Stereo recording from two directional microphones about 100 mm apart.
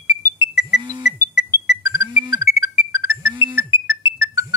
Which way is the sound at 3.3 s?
50° right (ahead or behind).